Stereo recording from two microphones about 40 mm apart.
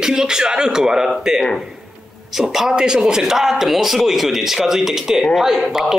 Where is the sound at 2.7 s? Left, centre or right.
Right.